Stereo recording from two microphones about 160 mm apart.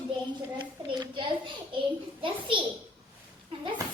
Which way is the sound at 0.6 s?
30° right (ahead or behind).